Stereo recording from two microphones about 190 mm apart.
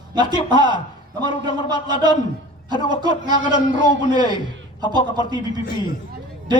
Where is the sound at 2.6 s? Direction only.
20° right (ahead or behind).